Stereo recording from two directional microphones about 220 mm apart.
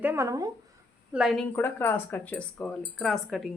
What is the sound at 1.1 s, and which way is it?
Speech, centre (ahead or behind).